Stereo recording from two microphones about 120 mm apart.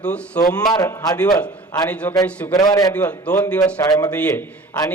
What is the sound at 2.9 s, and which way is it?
Speech, 15° left (ahead or behind).